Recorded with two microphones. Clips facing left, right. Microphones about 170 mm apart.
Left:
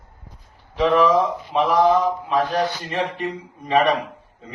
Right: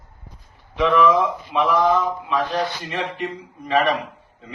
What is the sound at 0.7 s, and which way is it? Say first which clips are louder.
Speech: even; 35° left (ahead or behind).